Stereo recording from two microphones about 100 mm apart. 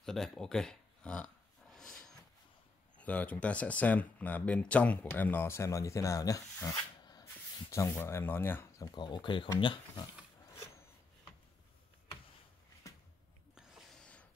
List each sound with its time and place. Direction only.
0.0 s speech: 5° left (ahead or behind)
1.7 s dog: 5° left (ahead or behind)
3.0 s speech: 15° left (ahead or behind); by 7.2 s 40° left (ahead or behind)
8.0 s speech: 20° left (ahead or behind)
8.7 s speech: 40° left (ahead or behind)
13.6 s a sound: centre (ahead or behind)